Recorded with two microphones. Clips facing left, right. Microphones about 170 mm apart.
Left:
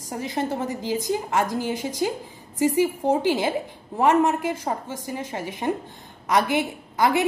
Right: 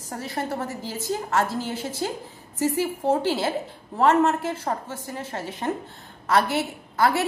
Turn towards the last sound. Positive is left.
turn(degrees=15)  # may be behind; listen again after turning